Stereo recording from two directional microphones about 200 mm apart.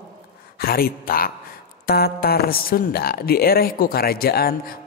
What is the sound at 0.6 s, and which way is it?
A man's voice, 50° left (ahead or behind).